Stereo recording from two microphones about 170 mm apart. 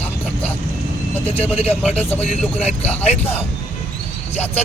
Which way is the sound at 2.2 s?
40° left (ahead or behind).